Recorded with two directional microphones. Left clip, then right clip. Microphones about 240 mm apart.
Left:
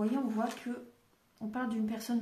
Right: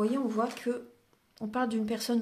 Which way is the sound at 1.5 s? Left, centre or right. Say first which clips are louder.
Right 6 dB; right.